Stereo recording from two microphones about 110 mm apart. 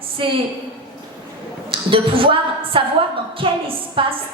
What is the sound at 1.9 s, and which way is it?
A woman's voice, 55° right (ahead or behind).